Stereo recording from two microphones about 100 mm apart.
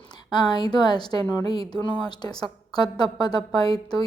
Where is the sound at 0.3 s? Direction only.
45° left (ahead or behind).